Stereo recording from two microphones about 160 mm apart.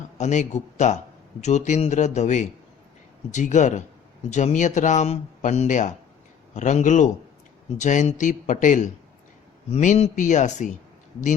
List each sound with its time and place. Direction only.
0.2 s speech: 45° left (ahead or behind)